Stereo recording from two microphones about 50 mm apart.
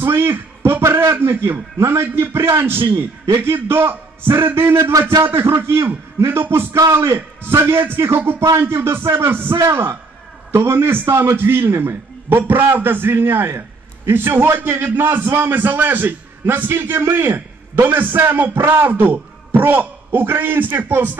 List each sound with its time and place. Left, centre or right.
0.0 s a sound: right
1.3 s a man's voice: right
1.8 s a man's voice: right
6.7 s a man's voice: right
7.4 s a man's voice: right
11.1 s a man's voice: right
11.3 s a man's voice: right